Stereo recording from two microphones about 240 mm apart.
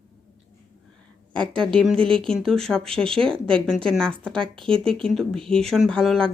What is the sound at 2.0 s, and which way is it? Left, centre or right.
Speech, right.